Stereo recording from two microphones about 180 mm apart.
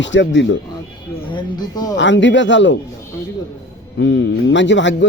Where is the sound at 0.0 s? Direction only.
90° left.